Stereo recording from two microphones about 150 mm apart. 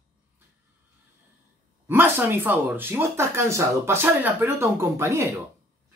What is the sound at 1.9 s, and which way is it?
Speech, 15° right (ahead or behind).